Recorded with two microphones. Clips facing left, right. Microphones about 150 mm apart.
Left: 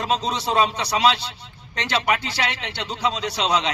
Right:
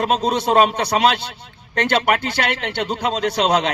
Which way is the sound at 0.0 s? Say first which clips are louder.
Right 5 dB; 55° right (ahead or behind).